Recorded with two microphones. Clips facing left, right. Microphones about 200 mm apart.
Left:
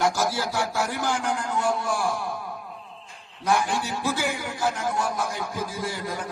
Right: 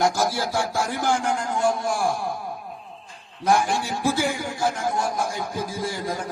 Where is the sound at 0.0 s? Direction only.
15° right (ahead or behind).